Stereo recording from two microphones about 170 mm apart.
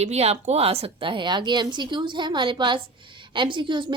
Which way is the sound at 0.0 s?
40° right (ahead or behind).